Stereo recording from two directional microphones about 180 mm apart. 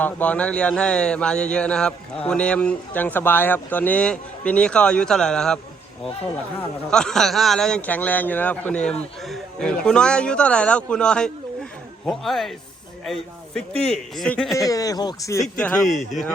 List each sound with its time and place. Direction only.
0.0 s speech: 10° left (ahead or behind)
6.9 s speech: 5° left (ahead or behind)
14.5 s speech: 20° left (ahead or behind)
15.5 s speech: 5° left (ahead or behind)